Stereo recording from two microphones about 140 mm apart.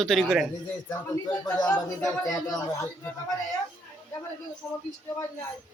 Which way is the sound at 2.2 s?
25° left (ahead or behind).